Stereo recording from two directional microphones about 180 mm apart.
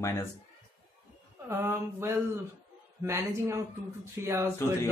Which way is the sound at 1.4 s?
15° right (ahead or behind).